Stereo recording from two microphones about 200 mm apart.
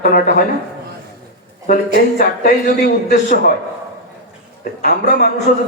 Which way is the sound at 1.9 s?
55° left (ahead or behind).